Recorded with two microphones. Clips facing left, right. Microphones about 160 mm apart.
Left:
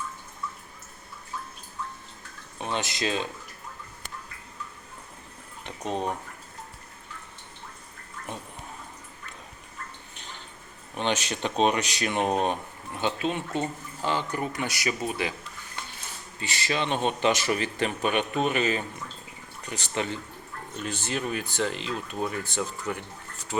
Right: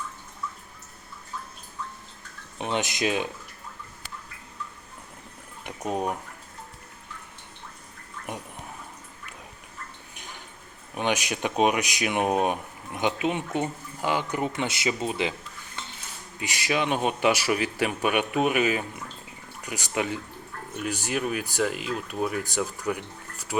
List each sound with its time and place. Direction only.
2.6 s speech: 20° right (ahead or behind)
5.6 s speech: 10° right (ahead or behind)
10.2 s a sound: 10° right (ahead or behind)
10.9 s speech: 10° right (ahead or behind)
16.4 s speech: 15° right (ahead or behind)